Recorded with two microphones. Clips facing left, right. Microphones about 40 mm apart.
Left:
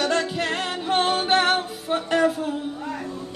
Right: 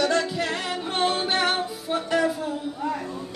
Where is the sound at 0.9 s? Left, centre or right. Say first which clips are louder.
Left 4 dB; left.